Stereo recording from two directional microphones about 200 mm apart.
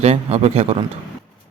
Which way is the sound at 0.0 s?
30° right (ahead or behind).